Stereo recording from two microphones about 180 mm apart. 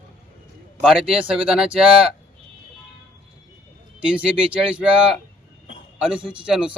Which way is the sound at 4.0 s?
5° right (ahead or behind).